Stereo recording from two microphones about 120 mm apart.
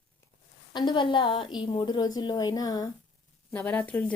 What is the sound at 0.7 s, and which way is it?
A woman's voice, 40° left (ahead or behind).